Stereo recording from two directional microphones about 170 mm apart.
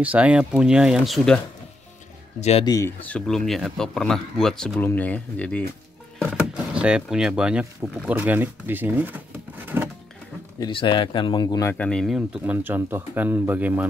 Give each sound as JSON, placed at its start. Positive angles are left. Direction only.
{"t": 0.0, "sound": "speech", "side_deg": -10}
{"t": 2.6, "sound": "speech", "side_deg": 20}
{"t": 3.1, "sound": "speech", "side_deg": 5}
{"t": 6.2, "sound": "speech", "side_deg": -5}
{"t": 9.7, "sound": "a sound", "side_deg": -15}
{"t": 10.6, "sound": "speech", "side_deg": 30}
{"t": 11.7, "sound": "speech", "side_deg": 5}